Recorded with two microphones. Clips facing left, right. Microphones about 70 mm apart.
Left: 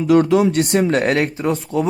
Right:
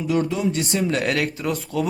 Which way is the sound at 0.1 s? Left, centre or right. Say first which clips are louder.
Left 9 dB; left.